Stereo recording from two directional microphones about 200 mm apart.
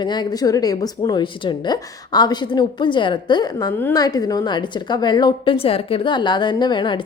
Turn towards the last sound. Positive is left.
turn(degrees=25)  # may be behind; listen again after turning